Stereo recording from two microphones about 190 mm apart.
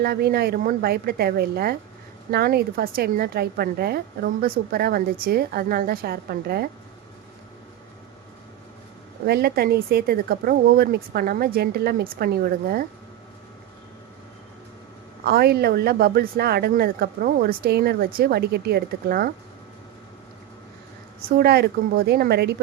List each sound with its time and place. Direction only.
0.0 s a woman's voice: 55° right (ahead or behind)
9.2 s a woman's voice: 55° right (ahead or behind)
15.2 s speech: 55° right (ahead or behind)
21.2 s speech: 55° right (ahead or behind)